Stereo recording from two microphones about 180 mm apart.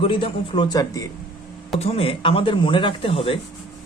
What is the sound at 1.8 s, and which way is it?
Speech, 35° left (ahead or behind).